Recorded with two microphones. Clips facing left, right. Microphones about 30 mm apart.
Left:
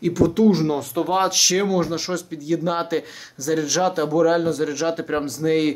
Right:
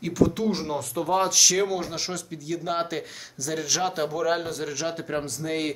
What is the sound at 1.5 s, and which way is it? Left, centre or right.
A man's voice, centre.